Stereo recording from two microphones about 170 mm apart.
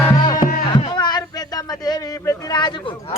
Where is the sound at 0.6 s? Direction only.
30° left (ahead or behind).